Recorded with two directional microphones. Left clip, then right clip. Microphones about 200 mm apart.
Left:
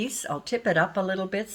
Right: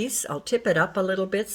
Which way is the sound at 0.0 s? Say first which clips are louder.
Right 1 dB; 30° right (ahead or behind).